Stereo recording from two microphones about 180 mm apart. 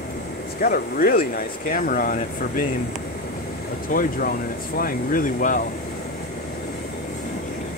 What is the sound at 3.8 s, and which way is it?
Speech, 50° left (ahead or behind).